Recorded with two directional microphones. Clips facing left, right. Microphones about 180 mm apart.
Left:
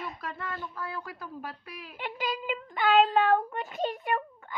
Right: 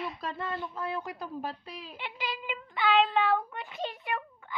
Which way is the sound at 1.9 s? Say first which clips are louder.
Left 5 dB; 45° left (ahead or behind).